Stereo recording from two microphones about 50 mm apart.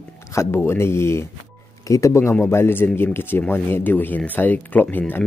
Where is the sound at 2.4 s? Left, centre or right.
Left.